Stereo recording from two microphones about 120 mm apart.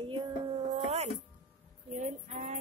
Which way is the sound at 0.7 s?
65° right (ahead or behind).